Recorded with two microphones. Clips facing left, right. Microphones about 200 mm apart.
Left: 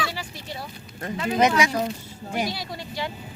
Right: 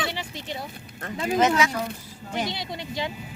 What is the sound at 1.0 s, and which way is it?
Speech, 15° left (ahead or behind).